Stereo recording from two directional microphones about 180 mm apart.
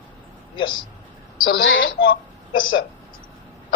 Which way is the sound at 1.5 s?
90° left.